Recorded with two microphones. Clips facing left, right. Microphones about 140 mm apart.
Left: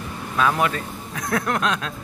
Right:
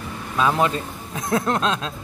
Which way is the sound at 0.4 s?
20° right (ahead or behind).